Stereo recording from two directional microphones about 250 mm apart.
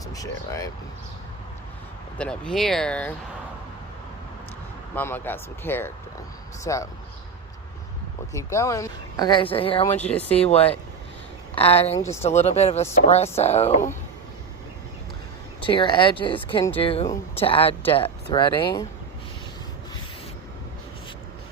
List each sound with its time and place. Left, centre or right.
0.1 s speech: centre
2.1 s speech: centre
4.9 s speech: centre
8.3 s speech: centre
10.1 s speech: centre
10.3 s speech: left
15.6 s speech: centre